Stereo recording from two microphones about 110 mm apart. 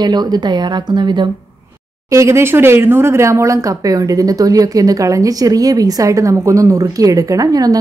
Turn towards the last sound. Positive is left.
turn(degrees=-35)  # may be behind; listen again after turning